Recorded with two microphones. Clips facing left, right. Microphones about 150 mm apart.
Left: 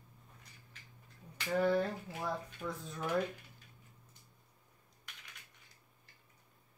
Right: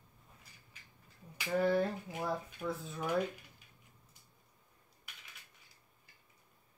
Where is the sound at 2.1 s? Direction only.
10° right (ahead or behind).